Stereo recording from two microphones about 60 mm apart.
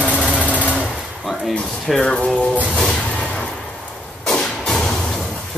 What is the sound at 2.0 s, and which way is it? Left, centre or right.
Speech, centre.